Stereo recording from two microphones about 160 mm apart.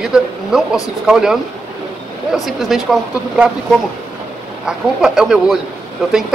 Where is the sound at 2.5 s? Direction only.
Centre (ahead or behind).